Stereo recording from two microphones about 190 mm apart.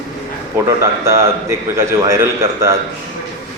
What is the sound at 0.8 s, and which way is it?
A man's voice, 15° right (ahead or behind).